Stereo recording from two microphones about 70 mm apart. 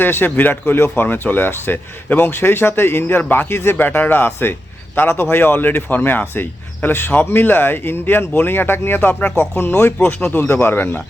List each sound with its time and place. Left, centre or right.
0.0 s speech: left